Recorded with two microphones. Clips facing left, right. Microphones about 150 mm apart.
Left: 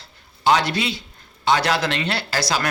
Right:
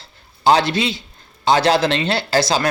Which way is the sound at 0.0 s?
30° right (ahead or behind).